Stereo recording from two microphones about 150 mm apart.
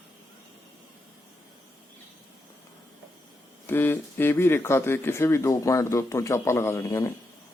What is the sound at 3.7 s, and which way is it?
Speech, 15° left (ahead or behind).